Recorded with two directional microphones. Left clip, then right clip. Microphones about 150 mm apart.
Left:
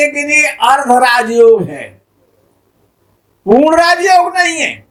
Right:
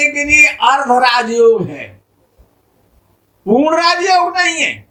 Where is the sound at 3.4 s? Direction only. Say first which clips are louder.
Left 4 dB; 55° left (ahead or behind).